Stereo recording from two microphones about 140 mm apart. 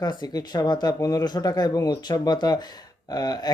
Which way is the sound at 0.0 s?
30° left (ahead or behind).